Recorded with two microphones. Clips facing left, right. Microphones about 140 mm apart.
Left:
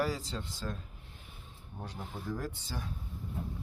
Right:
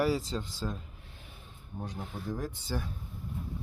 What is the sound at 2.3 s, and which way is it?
Speech, 15° right (ahead or behind).